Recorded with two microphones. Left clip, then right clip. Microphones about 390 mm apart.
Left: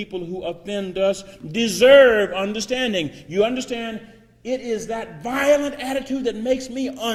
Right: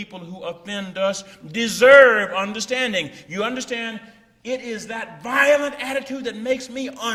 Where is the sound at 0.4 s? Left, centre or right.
Right.